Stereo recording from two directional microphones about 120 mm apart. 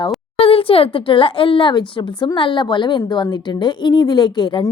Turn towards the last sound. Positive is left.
turn(degrees=40)  # may be behind; listen again after turning